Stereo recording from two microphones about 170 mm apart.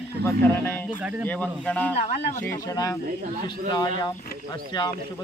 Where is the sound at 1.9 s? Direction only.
40° left (ahead or behind).